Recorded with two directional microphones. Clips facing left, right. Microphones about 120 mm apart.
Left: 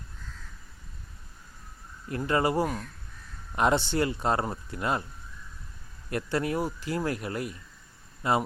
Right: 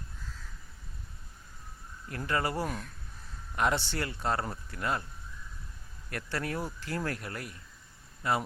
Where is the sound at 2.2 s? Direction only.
20° left (ahead or behind).